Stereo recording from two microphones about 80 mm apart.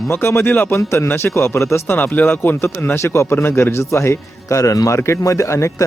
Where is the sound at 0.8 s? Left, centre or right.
Left.